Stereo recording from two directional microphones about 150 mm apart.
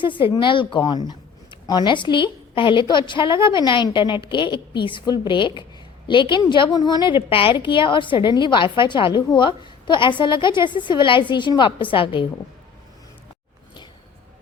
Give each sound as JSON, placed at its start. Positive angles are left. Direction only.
{"t": 0.0, "sound": "a woman's voice", "side_deg": 35}